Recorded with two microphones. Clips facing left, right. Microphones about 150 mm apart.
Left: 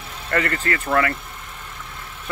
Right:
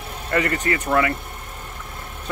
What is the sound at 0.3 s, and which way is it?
Speech, 15° right (ahead or behind).